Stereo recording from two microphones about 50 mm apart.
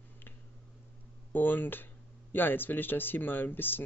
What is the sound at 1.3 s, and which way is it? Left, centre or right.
Speech, left.